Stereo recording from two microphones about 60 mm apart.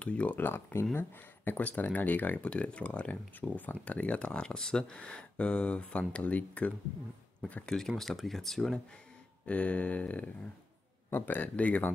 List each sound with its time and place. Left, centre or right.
0.0 s speech: left
0.4 s speech: left
7.6 s speech: centre
9.5 s speech: left